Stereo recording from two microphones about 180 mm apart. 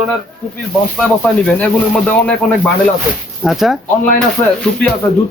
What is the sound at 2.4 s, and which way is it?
Speech, 5° left (ahead or behind).